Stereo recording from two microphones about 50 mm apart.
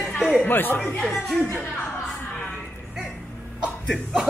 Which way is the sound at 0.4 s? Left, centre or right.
Left.